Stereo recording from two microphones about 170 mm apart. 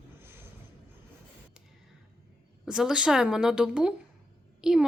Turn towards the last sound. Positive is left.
turn(degrees=-5)  # may be behind; listen again after turning